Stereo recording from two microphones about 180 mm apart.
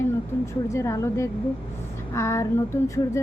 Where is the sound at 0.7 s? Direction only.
15° left (ahead or behind).